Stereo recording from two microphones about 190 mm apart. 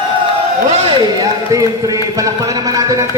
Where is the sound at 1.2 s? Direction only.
20° right (ahead or behind).